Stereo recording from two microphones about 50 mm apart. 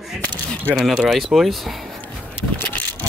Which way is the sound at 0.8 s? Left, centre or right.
Centre.